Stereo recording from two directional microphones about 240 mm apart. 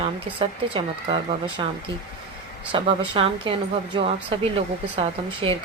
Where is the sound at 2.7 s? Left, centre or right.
Right.